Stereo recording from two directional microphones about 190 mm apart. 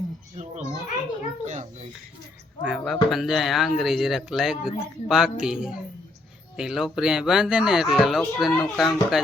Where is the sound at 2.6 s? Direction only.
Centre (ahead or behind).